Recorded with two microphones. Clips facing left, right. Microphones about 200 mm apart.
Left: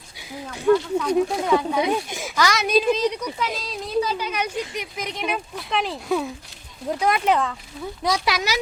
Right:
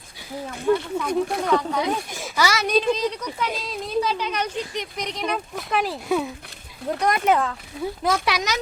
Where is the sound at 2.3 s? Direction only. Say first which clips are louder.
Left 1 dB; 5° right (ahead or behind).